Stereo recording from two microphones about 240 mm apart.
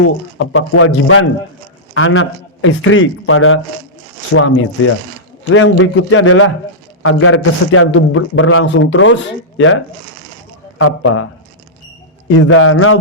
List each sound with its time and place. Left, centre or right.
0.0 s a man's voice: left
12.4 s a man's voice: left